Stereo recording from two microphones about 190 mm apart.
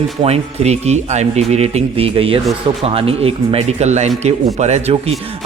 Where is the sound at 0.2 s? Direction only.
35° right (ahead or behind).